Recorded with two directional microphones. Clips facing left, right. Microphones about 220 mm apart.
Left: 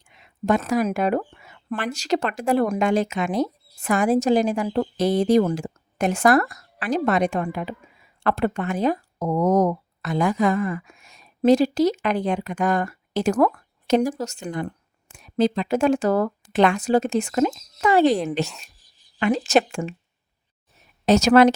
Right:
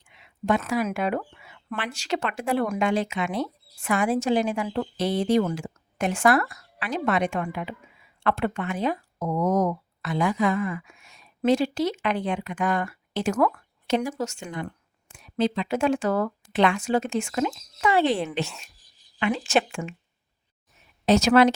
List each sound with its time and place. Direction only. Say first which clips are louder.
0.1 s speech: left 3 dB; 45° left (ahead or behind)
18.4 s speech: left 1 dB; centre (ahead or behind)
19.2 s speech: left 4 dB; 40° left (ahead or behind)
21.1 s speech: left 3 dB; 45° left (ahead or behind)